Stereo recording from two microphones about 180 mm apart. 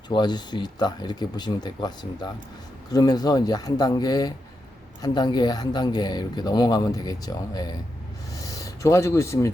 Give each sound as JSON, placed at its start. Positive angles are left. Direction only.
{"t": 0.1, "sound": "speech", "side_deg": 25}
{"t": 2.9, "sound": "speech", "side_deg": 20}